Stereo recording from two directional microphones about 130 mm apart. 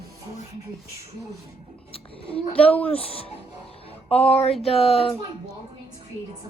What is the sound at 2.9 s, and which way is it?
Speech, 45° left (ahead or behind).